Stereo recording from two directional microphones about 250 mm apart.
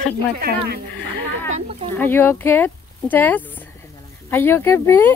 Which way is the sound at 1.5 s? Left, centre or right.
Right.